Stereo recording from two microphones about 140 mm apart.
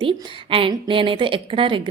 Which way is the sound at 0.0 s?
40° right (ahead or behind).